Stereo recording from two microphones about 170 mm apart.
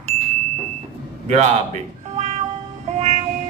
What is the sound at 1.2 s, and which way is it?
Speech, 40° right (ahead or behind).